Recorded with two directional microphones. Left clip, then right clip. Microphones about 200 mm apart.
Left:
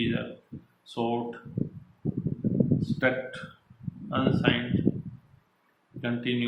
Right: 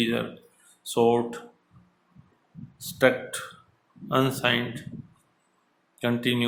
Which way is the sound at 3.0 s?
65° right (ahead or behind).